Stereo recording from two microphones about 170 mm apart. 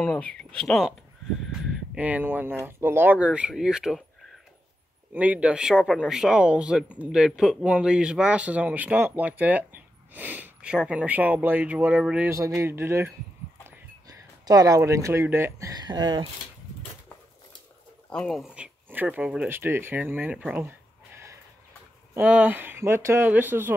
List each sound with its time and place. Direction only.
0.0 s speech: 5° left (ahead or behind)
2.0 s speech: 10° right (ahead or behind)
5.1 s speech: 10° right (ahead or behind)
12.4 s speech: 15° right (ahead or behind)
18.1 s speech: centre (ahead or behind)
22.1 s speech: 10° right (ahead or behind)